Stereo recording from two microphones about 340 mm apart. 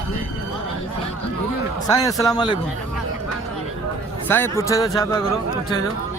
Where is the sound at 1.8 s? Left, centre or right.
Centre.